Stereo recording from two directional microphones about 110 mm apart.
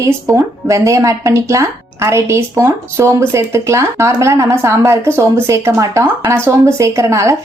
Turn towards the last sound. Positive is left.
turn(degrees=-25)  # may be behind; listen again after turning